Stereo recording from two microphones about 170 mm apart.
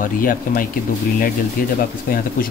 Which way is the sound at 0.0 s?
55° left (ahead or behind).